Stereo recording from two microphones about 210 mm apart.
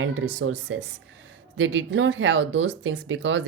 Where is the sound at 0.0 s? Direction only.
65° right (ahead or behind).